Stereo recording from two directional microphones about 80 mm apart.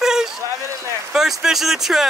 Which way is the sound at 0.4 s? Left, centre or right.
Right.